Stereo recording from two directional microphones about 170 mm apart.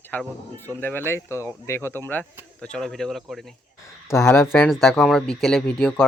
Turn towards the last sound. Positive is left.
turn(degrees=5)  # may be behind; listen again after turning